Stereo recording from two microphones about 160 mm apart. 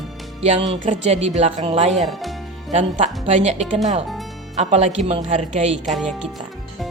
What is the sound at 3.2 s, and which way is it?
A woman's voice, 40° right (ahead or behind).